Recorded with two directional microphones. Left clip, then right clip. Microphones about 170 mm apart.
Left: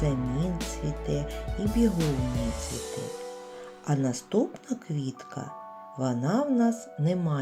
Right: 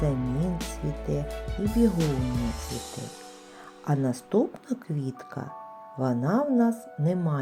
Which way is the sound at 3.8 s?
25° right (ahead or behind).